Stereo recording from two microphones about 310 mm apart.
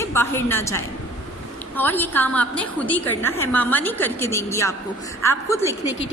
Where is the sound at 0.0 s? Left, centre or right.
Centre.